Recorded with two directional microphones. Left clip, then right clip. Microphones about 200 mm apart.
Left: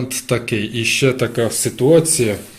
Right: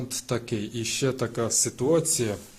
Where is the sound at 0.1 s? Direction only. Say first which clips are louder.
Left 10 dB; 15° right (ahead or behind).